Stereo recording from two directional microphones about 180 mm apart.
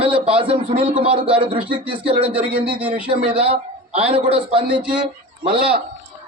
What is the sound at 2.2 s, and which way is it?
Speech, 10° right (ahead or behind).